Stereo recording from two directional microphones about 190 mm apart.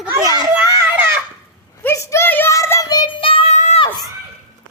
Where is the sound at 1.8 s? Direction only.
15° left (ahead or behind); by 3.8 s 35° left (ahead or behind).